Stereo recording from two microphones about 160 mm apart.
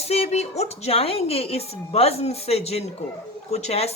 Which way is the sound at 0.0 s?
40° left (ahead or behind).